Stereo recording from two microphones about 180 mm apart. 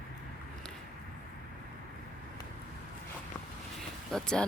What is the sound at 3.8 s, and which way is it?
Vehicle, 5° left (ahead or behind).